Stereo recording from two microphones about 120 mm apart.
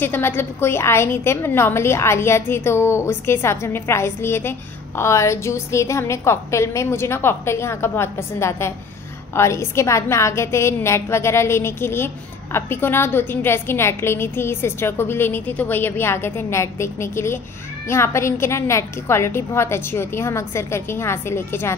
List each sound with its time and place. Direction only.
0.0 s a woman's voice: 15° left (ahead or behind)